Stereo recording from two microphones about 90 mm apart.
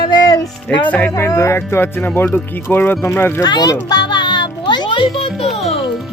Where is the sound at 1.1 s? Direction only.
35° left (ahead or behind).